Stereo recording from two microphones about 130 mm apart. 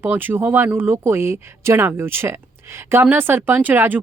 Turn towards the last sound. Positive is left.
turn(degrees=-15)  # may be behind; listen again after turning